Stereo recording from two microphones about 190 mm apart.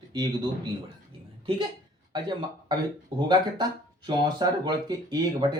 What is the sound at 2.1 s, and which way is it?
Speech, 25° right (ahead or behind).